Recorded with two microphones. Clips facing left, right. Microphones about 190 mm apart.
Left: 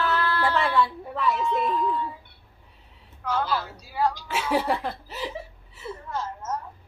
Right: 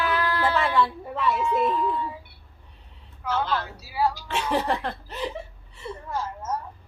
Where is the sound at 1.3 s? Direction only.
10° right (ahead or behind).